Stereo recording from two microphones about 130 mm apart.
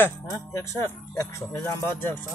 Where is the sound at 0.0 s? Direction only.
25° left (ahead or behind).